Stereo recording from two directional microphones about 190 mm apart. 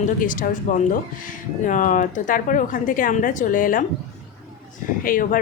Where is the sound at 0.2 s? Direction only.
45° left (ahead or behind).